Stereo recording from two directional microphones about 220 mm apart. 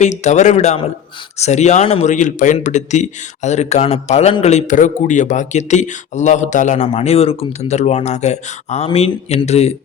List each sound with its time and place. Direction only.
0.0 s speech: 30° left (ahead or behind)